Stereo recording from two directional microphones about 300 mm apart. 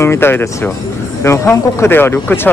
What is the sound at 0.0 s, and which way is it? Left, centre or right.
Speech, centre.